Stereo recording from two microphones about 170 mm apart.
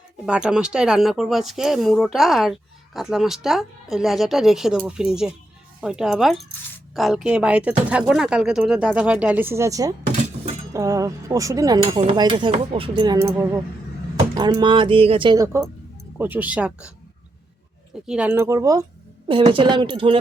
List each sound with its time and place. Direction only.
0.3 s speech: 5° right (ahead or behind); by 13.1 s 30° right (ahead or behind)
13.1 s speech: 15° right (ahead or behind)
18.0 s speech: 5° right (ahead or behind); by 20.1 s 30° right (ahead or behind)